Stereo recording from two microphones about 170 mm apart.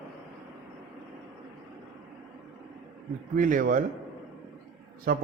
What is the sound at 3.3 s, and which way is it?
Speech, 55° right (ahead or behind).